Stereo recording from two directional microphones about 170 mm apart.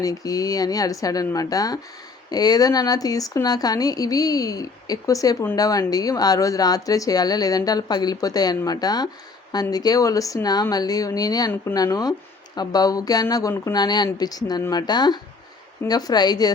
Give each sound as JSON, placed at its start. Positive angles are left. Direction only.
{"t": 0.0, "sound": "speech", "side_deg": 20}